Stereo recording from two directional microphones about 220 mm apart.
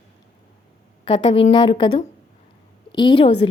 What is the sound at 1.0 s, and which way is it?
Speech, 25° left (ahead or behind).